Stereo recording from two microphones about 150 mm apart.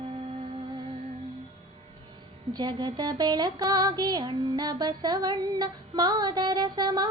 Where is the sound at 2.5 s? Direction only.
30° right (ahead or behind).